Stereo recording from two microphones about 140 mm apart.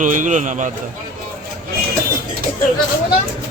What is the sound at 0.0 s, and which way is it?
Speech, 65° right (ahead or behind).